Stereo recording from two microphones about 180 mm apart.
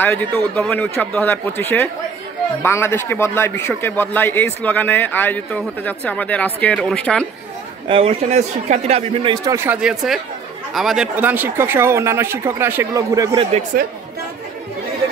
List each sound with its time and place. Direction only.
0.0 s speech: 10° left (ahead or behind)
7.9 s speech: 35° right (ahead or behind)
9.3 s speech: 20° right (ahead or behind)
13.4 s speech: 35° right (ahead or behind)